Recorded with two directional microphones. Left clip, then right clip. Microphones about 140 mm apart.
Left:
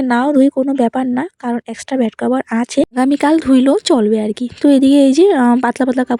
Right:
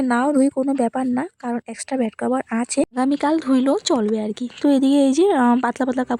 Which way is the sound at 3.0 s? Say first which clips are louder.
Left 7 dB; 40° left (ahead or behind).